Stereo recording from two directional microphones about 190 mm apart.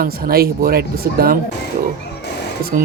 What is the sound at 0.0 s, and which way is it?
Speech, 50° right (ahead or behind).